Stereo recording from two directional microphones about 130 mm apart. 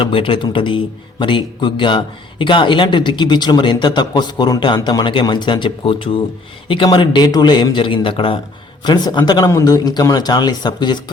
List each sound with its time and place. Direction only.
0.0 s speech: 40° left (ahead or behind)